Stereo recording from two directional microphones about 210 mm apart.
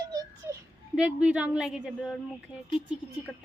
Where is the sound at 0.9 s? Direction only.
5° right (ahead or behind).